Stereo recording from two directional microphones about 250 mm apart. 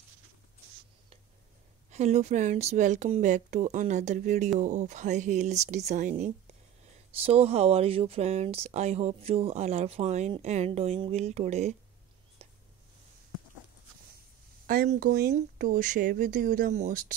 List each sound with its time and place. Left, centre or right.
1.9 s speech: right
12.4 s whispering: right
14.7 s speech: right